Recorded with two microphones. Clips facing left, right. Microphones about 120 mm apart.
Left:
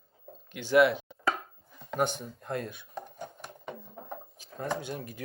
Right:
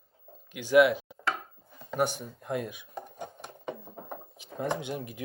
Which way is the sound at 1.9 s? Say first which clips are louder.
Right 1 dB; 10° right (ahead or behind).